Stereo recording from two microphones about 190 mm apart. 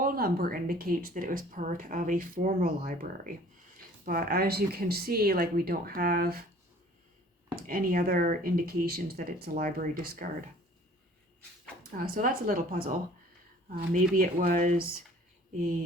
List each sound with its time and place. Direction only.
0.0 s speech: 50° right (ahead or behind)
7.5 s speech: 50° right (ahead or behind)
11.9 s speech: 50° right (ahead or behind)